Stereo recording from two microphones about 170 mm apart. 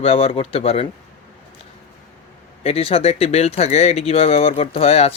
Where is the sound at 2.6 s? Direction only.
35° left (ahead or behind).